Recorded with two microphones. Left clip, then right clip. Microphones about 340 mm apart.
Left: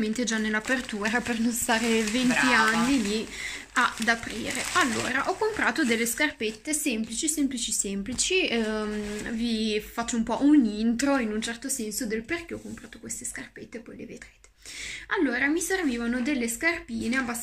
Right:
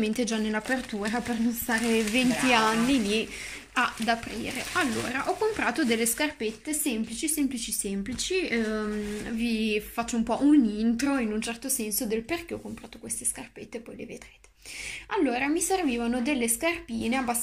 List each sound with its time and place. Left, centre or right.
0.0 s speech: centre
15.0 s speech: centre